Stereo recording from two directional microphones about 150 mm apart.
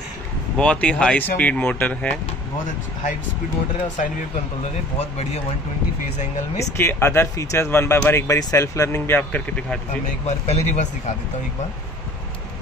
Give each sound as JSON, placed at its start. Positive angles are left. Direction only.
{"t": 0.6, "sound": "speech", "side_deg": 5}
{"t": 4.9, "sound": "speech", "side_deg": 45}
{"t": 6.6, "sound": "speech", "side_deg": 15}
{"t": 10.2, "sound": "speech", "side_deg": 45}